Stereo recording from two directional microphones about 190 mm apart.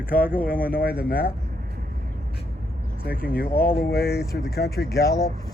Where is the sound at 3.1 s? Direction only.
50° left (ahead or behind).